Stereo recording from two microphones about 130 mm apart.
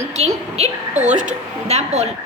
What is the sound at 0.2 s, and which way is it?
Speech, 55° right (ahead or behind).